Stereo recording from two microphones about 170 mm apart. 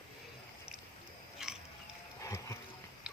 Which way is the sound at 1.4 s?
5° right (ahead or behind).